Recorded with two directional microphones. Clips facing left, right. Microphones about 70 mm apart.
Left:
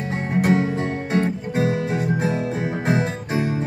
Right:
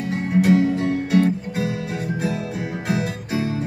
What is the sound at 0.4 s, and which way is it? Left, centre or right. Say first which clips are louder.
Music: right 3 dB; left.